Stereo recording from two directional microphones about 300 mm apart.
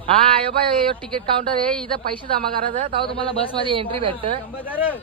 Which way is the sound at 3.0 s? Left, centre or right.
Centre.